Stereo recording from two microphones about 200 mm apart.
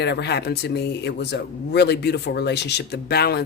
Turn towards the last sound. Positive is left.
turn(degrees=55)  # may be behind; listen again after turning